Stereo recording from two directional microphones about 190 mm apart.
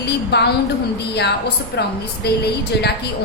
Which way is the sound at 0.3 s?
60° left (ahead or behind).